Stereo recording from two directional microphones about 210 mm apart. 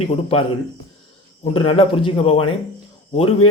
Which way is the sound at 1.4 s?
25° left (ahead or behind).